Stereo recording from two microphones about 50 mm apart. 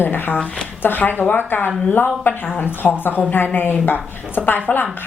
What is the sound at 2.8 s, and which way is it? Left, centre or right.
Speech, centre.